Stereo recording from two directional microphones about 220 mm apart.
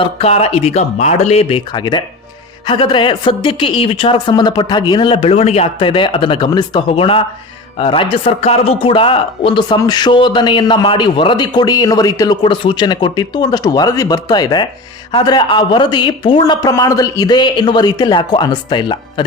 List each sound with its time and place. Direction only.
0.0 s speech: 25° left (ahead or behind)